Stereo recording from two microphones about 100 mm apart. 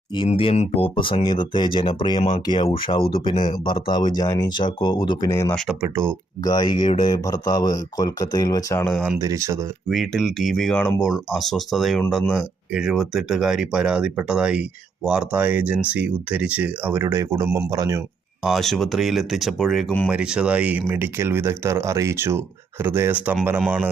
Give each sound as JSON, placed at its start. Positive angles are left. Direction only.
{"t": 0.1, "sound": "speech", "side_deg": 60}
{"t": 5.8, "sound": "speech", "side_deg": -25}
{"t": 6.4, "sound": "speech", "side_deg": 45}
{"t": 7.2, "sound": "speech", "side_deg": 35}
{"t": 9.1, "sound": "speech", "side_deg": -30}
{"t": 9.9, "sound": "speech", "side_deg": 0}
{"t": 18.4, "sound": "speech", "side_deg": 0}
{"t": 20.1, "sound": "speech", "side_deg": -10}